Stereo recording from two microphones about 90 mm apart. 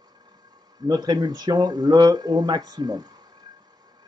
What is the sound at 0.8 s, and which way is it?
Speech, 50° right (ahead or behind).